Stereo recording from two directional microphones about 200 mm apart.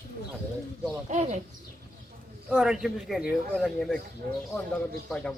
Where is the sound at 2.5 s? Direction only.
Centre (ahead or behind).